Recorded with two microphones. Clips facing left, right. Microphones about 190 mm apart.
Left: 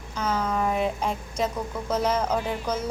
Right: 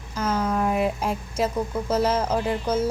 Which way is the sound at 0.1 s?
Centre (ahead or behind).